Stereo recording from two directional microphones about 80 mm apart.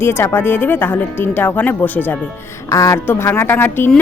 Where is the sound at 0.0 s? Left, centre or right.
Left.